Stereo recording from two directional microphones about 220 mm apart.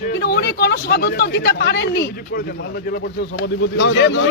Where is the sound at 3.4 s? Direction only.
60° left (ahead or behind).